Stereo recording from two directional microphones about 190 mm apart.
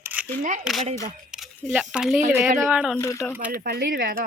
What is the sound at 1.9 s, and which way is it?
Speech, centre (ahead or behind).